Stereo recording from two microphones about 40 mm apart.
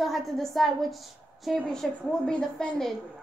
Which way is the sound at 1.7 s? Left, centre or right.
Centre.